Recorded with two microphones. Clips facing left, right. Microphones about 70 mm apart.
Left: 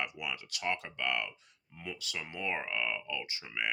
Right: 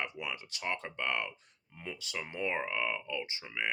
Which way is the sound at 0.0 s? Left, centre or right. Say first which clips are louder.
Even; right.